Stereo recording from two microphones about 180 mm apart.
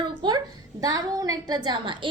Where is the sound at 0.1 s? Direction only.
25° right (ahead or behind).